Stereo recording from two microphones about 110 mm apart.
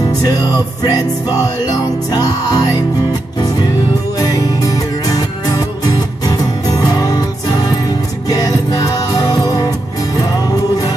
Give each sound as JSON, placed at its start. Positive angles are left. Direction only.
{"t": 0.2, "sound": "music", "side_deg": 35}